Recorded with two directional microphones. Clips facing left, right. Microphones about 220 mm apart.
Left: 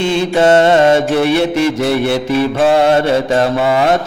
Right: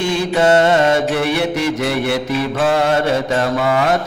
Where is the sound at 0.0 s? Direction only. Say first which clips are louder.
Left 3 dB; 25° left (ahead or behind).